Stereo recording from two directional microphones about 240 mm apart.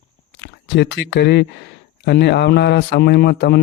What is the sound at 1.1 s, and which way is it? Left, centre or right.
Speech, left.